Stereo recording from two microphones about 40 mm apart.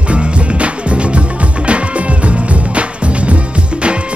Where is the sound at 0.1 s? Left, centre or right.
Right.